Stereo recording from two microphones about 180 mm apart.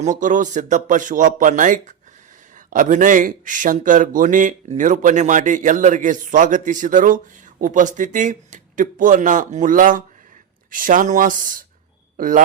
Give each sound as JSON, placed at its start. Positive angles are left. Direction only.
{"t": 0.0, "sound": "a man's voice", "side_deg": -45}